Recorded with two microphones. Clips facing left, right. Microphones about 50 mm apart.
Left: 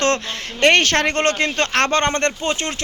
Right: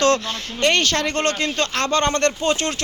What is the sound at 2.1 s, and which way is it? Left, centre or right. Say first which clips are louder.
Speech: right 1 dB; left.